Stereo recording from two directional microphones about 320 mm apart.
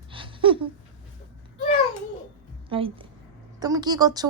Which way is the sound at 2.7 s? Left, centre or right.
Centre.